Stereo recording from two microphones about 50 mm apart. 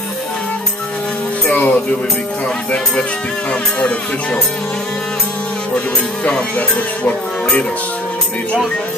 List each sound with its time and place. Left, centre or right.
1.5 s music: left
6.2 s music: left
7.1 s speech: left